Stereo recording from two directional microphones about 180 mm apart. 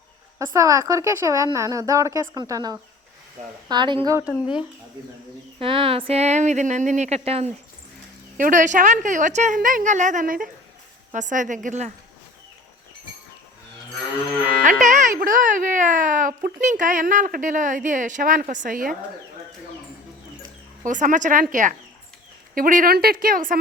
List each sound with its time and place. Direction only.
0.3 s speech: 20° right (ahead or behind)
5.5 s speech: 30° right (ahead or behind)
14.6 s speech: 45° right (ahead or behind)
20.8 s speech: 45° right (ahead or behind)